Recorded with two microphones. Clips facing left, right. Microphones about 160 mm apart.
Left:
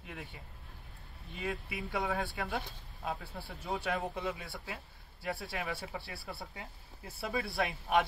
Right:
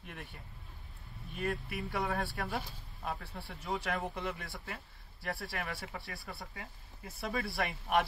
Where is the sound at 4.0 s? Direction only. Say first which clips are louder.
Left 1 dB; 20° left (ahead or behind).